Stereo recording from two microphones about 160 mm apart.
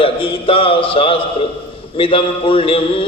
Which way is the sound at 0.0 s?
35° left (ahead or behind).